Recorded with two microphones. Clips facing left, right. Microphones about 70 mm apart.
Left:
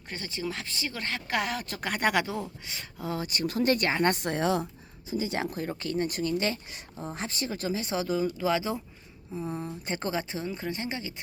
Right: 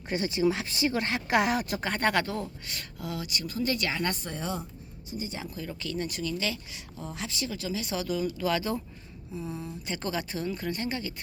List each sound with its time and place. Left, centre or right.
0.1 s speech: centre
1.8 s speech: centre
3.0 s speech: left
3.4 s speech: left
3.8 s speech: left
4.1 s a woman's voice: left
5.3 s speech: left
5.5 s speech: left; by 8.8 s centre
9.3 s speech: left